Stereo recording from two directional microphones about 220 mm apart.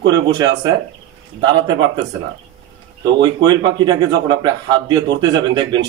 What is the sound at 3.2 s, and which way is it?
A man's voice, 20° right (ahead or behind).